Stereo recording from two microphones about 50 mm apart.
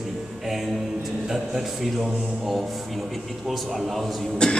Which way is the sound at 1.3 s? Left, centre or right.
Centre.